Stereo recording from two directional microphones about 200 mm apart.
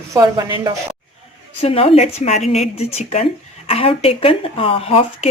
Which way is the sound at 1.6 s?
30° left (ahead or behind).